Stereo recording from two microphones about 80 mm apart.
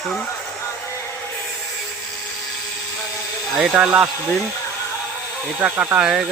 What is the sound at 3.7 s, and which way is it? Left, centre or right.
Speech, centre.